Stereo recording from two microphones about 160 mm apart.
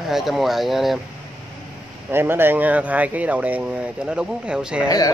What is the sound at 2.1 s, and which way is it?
Speech, 15° right (ahead or behind).